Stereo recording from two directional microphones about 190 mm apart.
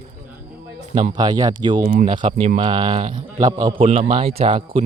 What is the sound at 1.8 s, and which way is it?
Speech, 45° right (ahead or behind).